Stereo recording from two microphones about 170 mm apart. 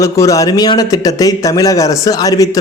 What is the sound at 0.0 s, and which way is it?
A man's voice, 20° left (ahead or behind).